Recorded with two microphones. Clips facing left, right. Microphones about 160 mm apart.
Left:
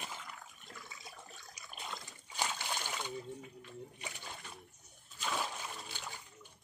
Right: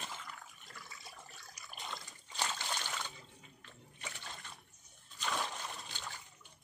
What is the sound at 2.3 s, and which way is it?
Splash, 10° left (ahead or behind).